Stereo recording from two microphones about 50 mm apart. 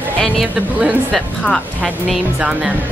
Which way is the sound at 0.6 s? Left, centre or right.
Right.